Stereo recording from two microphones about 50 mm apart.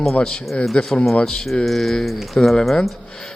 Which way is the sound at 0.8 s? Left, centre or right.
Left.